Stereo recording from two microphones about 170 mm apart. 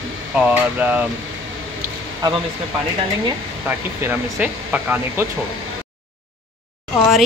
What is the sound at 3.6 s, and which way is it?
A woman's voice, 10° right (ahead or behind).